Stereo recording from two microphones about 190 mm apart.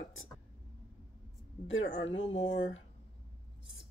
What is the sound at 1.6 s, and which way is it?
Speech, 85° left.